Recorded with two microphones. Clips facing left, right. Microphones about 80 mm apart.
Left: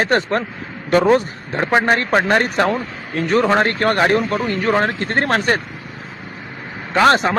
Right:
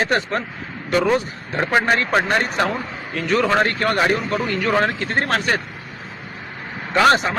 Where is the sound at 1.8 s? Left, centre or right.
Left.